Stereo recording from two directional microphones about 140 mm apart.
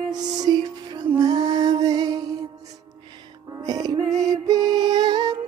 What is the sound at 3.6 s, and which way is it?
Music, 30° right (ahead or behind).